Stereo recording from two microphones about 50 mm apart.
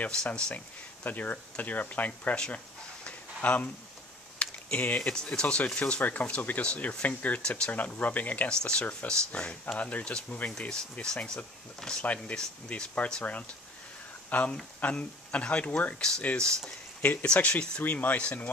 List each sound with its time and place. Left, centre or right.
0.1 s speech: centre
1.0 s speech: left
2.3 s a sound: centre
3.4 s speech: left
4.4 s computer keyboard: left
5.1 s speech: centre
7.4 s speech: centre
7.7 s speech: left
8.5 s speech: left
9.8 s speech: left
10.7 s speech: centre
12.0 s speech: left; by 16.7 s centre
17.0 s speech: left